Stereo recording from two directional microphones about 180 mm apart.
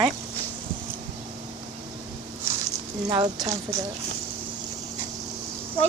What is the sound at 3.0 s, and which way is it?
Speech, 30° right (ahead or behind).